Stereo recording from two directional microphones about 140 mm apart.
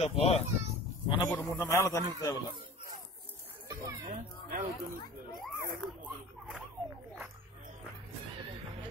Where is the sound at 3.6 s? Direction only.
20° right (ahead or behind).